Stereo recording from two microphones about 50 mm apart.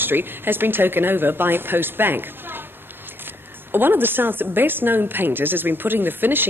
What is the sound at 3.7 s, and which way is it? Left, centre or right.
Speech, right.